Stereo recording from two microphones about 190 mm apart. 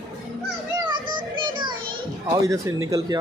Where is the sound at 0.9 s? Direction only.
25° right (ahead or behind).